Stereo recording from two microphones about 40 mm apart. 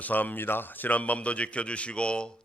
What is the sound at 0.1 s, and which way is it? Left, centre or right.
A man's voice, left.